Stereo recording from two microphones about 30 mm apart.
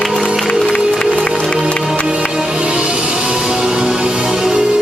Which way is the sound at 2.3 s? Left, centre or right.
Right.